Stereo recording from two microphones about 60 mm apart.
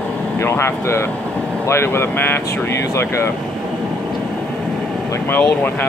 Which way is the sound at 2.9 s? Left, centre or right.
Left.